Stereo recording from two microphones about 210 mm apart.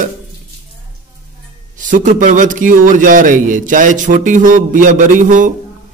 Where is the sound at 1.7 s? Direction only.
40° right (ahead or behind).